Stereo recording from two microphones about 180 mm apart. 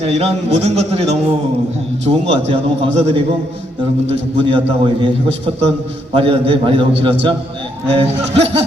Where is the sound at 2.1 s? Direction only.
30° right (ahead or behind).